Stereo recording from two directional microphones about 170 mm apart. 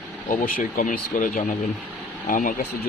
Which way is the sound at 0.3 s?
55° left (ahead or behind).